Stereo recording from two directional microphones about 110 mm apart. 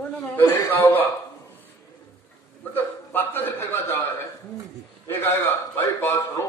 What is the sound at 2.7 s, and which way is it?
A man's voice, 20° left (ahead or behind).